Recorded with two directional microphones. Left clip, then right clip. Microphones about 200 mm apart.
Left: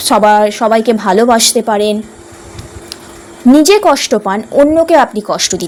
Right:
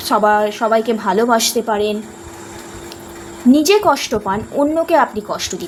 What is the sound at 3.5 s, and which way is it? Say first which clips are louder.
A woman's voice: left 5 dB; 35° left (ahead or behind).